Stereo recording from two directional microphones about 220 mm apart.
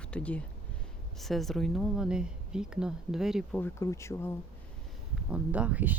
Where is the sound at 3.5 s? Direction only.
10° left (ahead or behind).